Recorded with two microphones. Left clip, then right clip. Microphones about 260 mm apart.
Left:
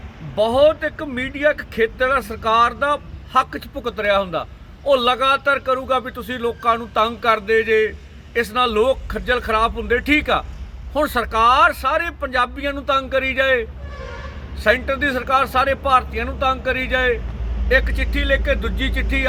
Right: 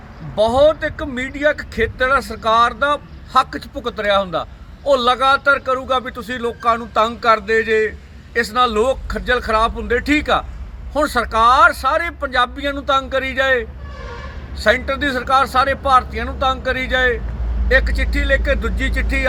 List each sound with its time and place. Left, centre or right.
0.3 s speech: centre